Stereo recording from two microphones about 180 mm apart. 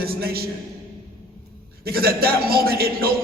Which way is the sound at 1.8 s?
60° right (ahead or behind).